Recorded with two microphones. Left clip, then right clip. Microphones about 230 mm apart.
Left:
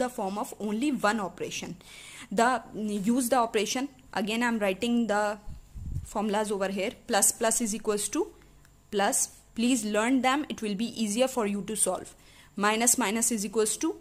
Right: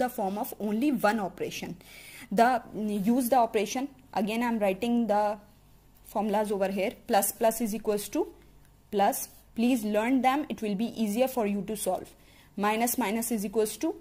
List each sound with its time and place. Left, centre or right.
0.0 s a woman's voice: centre